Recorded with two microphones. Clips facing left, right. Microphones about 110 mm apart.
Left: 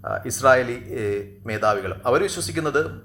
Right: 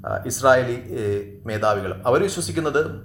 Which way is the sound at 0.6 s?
55° left (ahead or behind).